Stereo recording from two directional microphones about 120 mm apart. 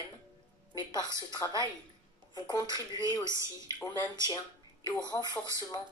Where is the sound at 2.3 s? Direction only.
35° left (ahead or behind).